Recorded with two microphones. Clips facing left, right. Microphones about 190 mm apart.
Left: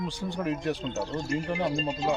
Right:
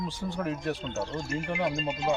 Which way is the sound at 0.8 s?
35° left (ahead or behind).